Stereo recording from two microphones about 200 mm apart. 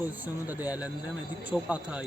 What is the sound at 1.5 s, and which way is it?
Speech, 5° right (ahead or behind).